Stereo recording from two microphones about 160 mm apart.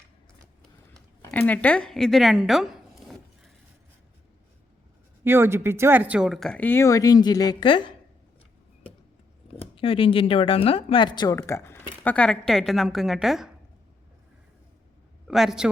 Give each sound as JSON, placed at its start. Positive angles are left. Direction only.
{"t": 1.2, "sound": "speech", "side_deg": 10}
{"t": 5.2, "sound": "speech", "side_deg": -15}
{"t": 9.7, "sound": "speech", "side_deg": 35}
{"t": 15.3, "sound": "a woman's voice", "side_deg": 0}